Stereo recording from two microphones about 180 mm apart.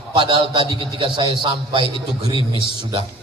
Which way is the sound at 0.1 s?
30° right (ahead or behind).